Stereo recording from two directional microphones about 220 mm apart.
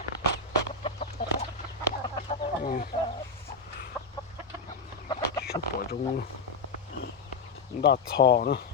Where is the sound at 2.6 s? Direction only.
35° left (ahead or behind).